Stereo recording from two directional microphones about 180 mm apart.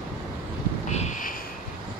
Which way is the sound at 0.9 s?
40° left (ahead or behind).